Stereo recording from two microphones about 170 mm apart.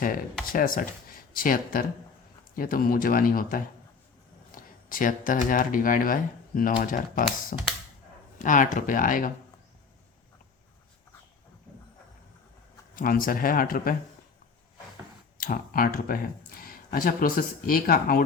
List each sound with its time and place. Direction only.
0.4 s speech: 55° left (ahead or behind)
13.0 s speech: 55° left (ahead or behind)
15.4 s speech: 55° left (ahead or behind)